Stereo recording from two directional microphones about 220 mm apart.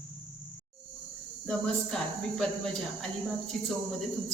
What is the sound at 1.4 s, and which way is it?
Speech, 5° left (ahead or behind).